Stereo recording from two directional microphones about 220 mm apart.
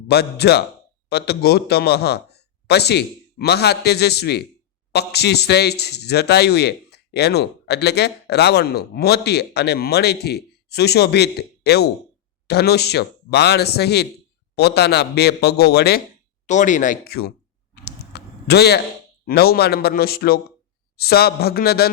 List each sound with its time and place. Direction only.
0.1 s a man's voice: 45° left (ahead or behind)
16.5 s speech: 35° left (ahead or behind)
17.8 s a sound: 50° left (ahead or behind)
19.2 s a man's voice: 45° left (ahead or behind)